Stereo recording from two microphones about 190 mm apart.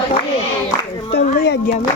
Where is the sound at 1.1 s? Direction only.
60° left (ahead or behind).